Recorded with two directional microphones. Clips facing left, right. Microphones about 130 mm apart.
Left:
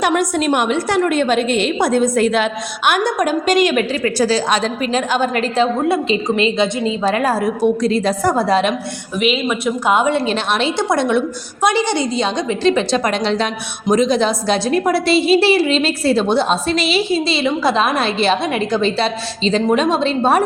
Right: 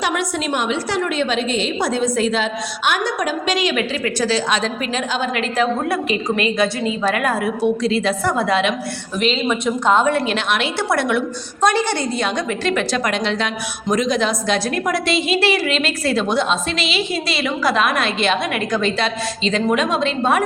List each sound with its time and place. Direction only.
0.1 s a woman's voice: 45° left (ahead or behind)
5.9 s a woman's voice: 25° left (ahead or behind)
9.2 s speech: 5° left (ahead or behind)
10.2 s a woman's voice: 30° left (ahead or behind)
10.8 s a woman's voice: 20° left (ahead or behind)